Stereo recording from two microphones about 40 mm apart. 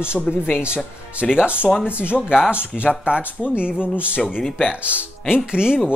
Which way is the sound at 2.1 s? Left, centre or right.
Centre.